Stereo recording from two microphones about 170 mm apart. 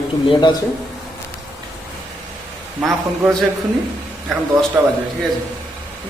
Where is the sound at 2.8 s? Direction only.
5° right (ahead or behind).